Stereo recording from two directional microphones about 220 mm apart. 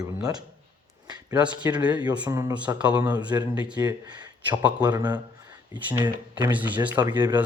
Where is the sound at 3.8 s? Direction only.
20° right (ahead or behind).